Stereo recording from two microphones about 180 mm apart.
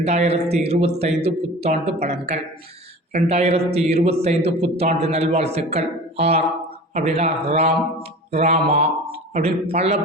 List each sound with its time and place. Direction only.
0.0 s speech: 35° right (ahead or behind)